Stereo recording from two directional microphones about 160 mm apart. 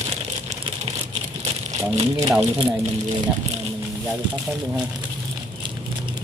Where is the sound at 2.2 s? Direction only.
20° right (ahead or behind).